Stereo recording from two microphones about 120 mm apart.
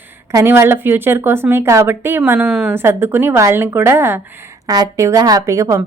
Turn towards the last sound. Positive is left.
turn(degrees=-25)  # may be behind; listen again after turning